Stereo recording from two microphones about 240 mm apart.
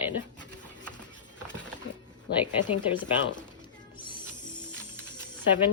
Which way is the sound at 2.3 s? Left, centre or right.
Left.